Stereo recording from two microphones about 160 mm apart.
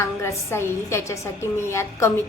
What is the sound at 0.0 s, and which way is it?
A woman's voice, 15° left (ahead or behind).